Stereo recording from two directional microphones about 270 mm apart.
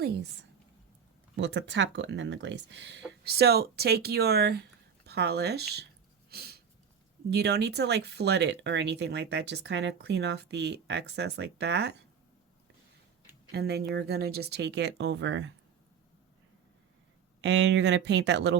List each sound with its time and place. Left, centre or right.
0.0 s a sound: right
1.4 s speech: right
6.3 s a sound: right
7.3 s speech: right
13.5 s speech: right
17.4 s speech: right